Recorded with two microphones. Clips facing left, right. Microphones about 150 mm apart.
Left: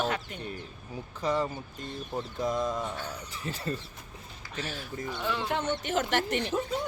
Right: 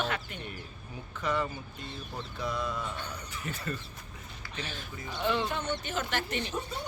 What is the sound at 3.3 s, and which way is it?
Speech, 30° left (ahead or behind).